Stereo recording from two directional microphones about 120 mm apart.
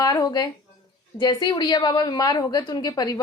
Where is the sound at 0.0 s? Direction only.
30° left (ahead or behind).